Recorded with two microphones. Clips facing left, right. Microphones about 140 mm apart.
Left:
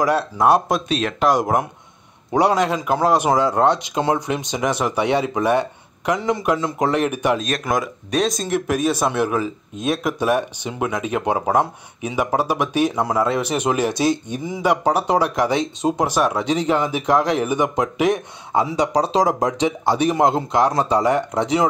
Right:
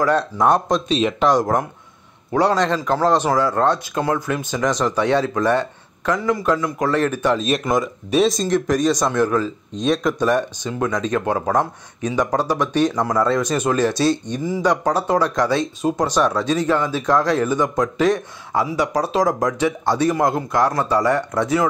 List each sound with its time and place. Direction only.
0.0 s a man's voice: 5° left (ahead or behind)
7.3 s a man's voice: centre (ahead or behind); by 21.6 s 15° left (ahead or behind)